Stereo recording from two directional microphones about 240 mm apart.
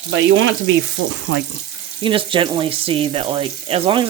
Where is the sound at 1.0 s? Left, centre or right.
Right.